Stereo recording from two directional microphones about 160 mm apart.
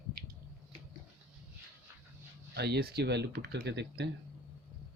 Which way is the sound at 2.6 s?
90° right.